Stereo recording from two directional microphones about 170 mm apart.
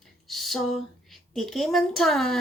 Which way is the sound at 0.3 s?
Centre (ahead or behind).